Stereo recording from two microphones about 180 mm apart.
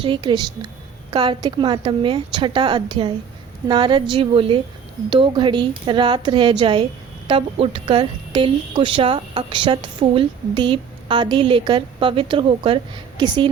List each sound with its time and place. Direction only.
0.0 s a woman's voice: 25° right (ahead or behind)